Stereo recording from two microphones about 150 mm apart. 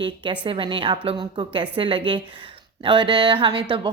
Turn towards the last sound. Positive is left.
turn(degrees=-35)  # may be behind; listen again after turning